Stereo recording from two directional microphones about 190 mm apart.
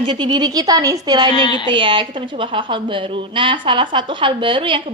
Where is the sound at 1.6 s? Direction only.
25° right (ahead or behind).